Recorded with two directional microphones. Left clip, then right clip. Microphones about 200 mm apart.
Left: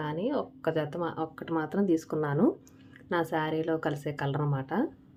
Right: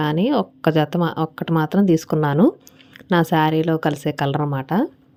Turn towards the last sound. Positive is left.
turn(degrees=-45)  # may be behind; listen again after turning